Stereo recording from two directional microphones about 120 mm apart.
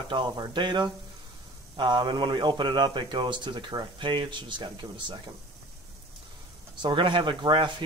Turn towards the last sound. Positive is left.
turn(degrees=-40)  # may be behind; listen again after turning